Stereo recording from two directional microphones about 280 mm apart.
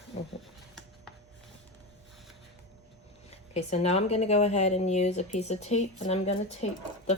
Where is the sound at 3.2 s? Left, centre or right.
Left.